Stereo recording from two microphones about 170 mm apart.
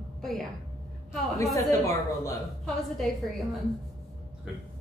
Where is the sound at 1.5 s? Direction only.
20° left (ahead or behind).